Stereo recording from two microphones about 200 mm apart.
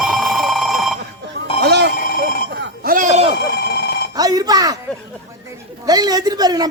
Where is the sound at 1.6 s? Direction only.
55° right (ahead or behind).